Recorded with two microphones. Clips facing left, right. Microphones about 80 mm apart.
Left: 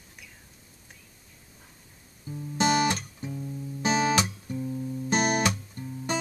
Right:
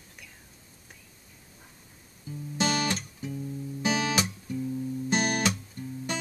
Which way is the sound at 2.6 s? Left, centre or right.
Centre.